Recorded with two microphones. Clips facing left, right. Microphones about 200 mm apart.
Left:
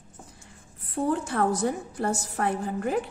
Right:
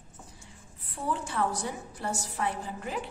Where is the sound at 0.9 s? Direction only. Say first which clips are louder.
Left 6 dB; 50° left (ahead or behind).